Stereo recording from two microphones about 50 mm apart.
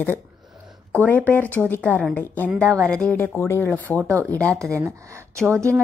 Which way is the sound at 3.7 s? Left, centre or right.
Left.